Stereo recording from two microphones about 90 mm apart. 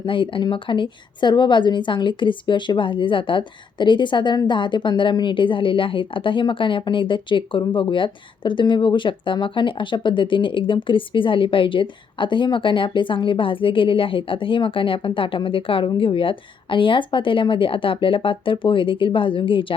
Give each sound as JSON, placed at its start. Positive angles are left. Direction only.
{"t": 0.0, "sound": "a woman's voice", "side_deg": 70}